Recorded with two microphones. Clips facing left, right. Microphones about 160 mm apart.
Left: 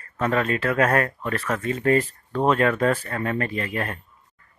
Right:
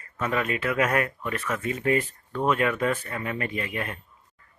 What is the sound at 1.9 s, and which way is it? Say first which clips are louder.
Speech: left 4 dB; 35° left (ahead or behind).